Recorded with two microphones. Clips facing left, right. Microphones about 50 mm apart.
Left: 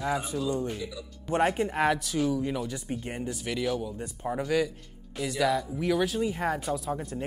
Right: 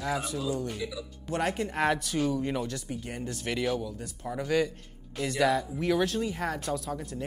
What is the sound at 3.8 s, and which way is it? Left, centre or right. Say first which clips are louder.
Speech: left 3 dB; left.